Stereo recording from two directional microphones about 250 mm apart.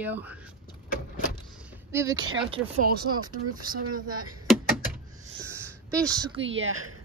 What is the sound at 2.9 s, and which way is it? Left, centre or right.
Speech, right.